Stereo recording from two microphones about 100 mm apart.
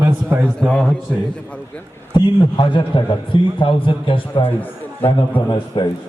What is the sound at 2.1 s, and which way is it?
A man's voice, 50° left (ahead or behind).